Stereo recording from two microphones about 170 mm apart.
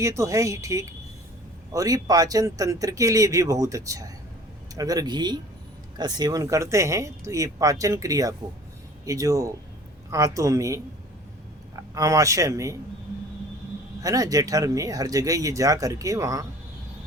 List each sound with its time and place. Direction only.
0.0 s speech: 20° right (ahead or behind)
11.8 s speech: 20° right (ahead or behind)
14.0 s speech: 20° right (ahead or behind)